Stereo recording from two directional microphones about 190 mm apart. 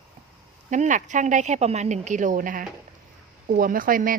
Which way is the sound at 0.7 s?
40° right (ahead or behind).